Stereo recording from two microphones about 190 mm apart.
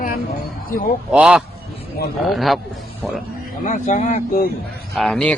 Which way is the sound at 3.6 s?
40° left (ahead or behind).